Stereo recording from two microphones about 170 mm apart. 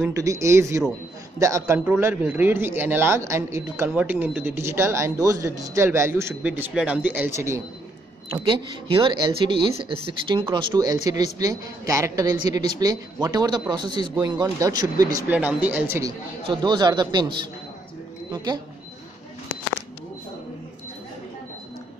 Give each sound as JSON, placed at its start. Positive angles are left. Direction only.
{"t": 0.1, "sound": "speech", "side_deg": -20}
{"t": 8.3, "sound": "a woman's voice", "side_deg": -30}
{"t": 15.3, "sound": "speech", "side_deg": -10}
{"t": 16.4, "sound": "a woman's voice", "side_deg": -25}
{"t": 18.3, "sound": "a woman's voice", "side_deg": -25}